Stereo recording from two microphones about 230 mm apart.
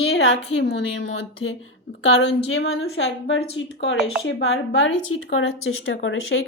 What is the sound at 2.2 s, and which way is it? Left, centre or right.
Speech, left.